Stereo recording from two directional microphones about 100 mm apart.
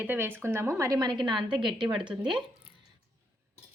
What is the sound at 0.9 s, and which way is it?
A woman's voice, 45° right (ahead or behind).